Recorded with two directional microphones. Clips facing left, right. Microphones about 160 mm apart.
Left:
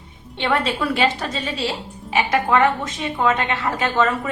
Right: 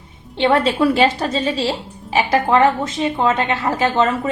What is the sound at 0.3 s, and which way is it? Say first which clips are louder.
Speech: right 6 dB; 30° right (ahead or behind).